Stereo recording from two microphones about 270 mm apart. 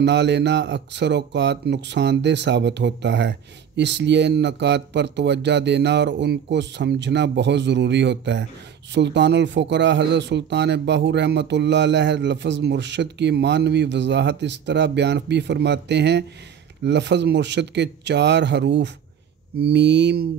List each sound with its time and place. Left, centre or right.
0.0 s a man's voice: right